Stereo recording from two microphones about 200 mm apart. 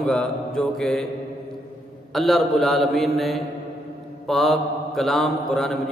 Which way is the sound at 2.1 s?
Centre (ahead or behind).